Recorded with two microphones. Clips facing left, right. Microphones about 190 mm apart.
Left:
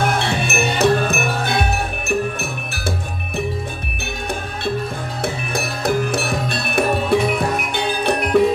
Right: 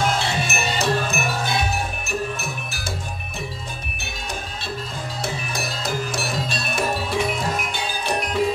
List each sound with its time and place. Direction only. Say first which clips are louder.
0.0 s wind chime: left 3 dB; 60° left (ahead or behind)
5.2 s music: left 5 dB; 60° left (ahead or behind)